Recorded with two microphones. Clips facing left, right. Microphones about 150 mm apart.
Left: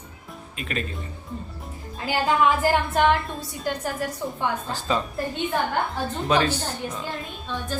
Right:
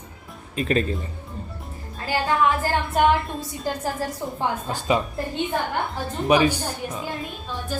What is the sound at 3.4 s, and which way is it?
A woman's voice, 30° right (ahead or behind).